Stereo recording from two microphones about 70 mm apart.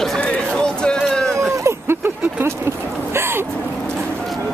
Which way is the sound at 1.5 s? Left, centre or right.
Right.